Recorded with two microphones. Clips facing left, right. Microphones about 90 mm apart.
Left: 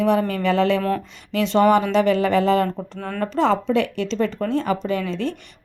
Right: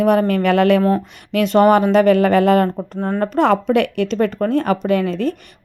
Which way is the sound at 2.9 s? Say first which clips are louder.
Right 8 dB; 30° right (ahead or behind).